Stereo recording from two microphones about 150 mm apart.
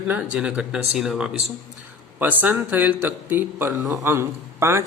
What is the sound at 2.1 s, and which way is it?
Speech, 10° right (ahead or behind).